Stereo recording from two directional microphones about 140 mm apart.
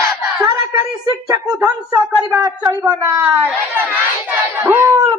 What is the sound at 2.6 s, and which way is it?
Speech, 15° right (ahead or behind).